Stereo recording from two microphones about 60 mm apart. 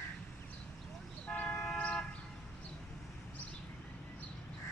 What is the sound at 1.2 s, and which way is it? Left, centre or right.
Toot, left.